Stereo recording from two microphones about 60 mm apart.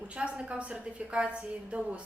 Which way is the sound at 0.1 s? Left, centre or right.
Centre.